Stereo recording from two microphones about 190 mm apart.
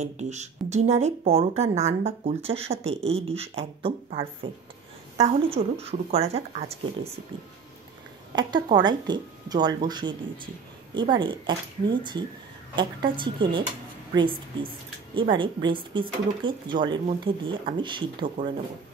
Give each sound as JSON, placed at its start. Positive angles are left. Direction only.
{"t": 0.0, "sound": "speech", "side_deg": -35}
{"t": 8.4, "sound": "speech", "side_deg": -25}
{"t": 15.1, "sound": "speech", "side_deg": -25}